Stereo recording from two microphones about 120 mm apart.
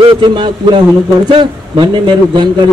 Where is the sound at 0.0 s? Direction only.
35° right (ahead or behind).